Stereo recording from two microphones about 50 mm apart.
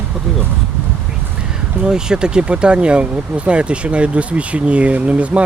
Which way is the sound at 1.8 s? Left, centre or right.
Centre.